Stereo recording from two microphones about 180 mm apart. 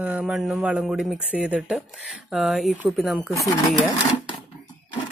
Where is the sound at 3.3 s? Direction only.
15° left (ahead or behind).